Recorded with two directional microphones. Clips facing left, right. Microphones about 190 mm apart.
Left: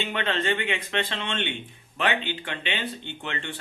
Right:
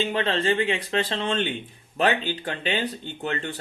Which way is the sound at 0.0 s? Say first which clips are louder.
Right 4 dB; 35° right (ahead or behind).